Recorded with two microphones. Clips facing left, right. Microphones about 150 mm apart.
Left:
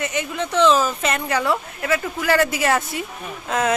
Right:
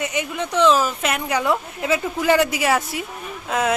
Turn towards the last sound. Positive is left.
turn(degrees=-5)  # may be behind; listen again after turning